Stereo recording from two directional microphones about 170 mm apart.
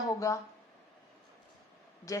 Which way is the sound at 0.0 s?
20° left (ahead or behind).